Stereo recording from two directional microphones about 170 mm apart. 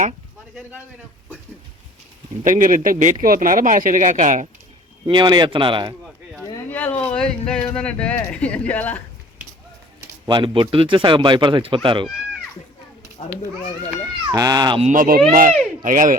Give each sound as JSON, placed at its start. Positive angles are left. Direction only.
{"t": 2.4, "sound": "speech", "side_deg": -50}
{"t": 5.0, "sound": "speech", "side_deg": -25}
{"t": 6.3, "sound": "a sound", "side_deg": 10}
{"t": 7.8, "sound": "speech", "side_deg": 5}
{"t": 10.2, "sound": "speech", "side_deg": -30}
{"t": 14.3, "sound": "speech", "side_deg": -20}
{"t": 14.8, "sound": "speech", "side_deg": -50}